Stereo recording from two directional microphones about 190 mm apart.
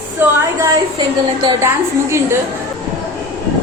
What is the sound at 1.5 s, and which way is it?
Speech, 15° right (ahead or behind).